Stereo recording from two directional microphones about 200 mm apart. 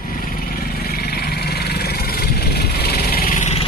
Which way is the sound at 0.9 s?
50° left (ahead or behind).